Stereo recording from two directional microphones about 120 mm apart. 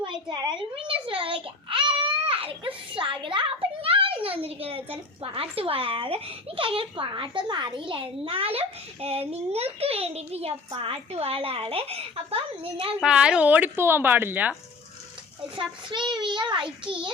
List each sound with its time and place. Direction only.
0.0 s a child's voice: 40° right (ahead or behind); by 12.4 s 55° right (ahead or behind)
13.0 s speech: 5° right (ahead or behind)
15.5 s a child's voice: 40° right (ahead or behind)